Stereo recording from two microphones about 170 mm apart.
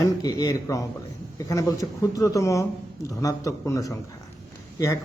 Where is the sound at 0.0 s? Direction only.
20° left (ahead or behind).